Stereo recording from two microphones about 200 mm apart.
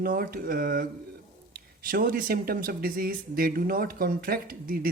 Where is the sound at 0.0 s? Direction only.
45° right (ahead or behind).